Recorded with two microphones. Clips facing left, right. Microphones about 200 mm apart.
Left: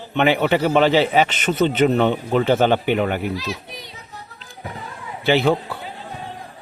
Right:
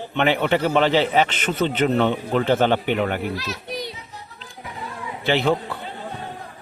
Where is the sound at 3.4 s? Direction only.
70° right (ahead or behind).